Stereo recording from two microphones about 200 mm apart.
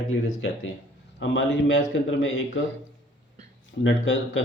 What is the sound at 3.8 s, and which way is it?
Speech, 75° left (ahead or behind).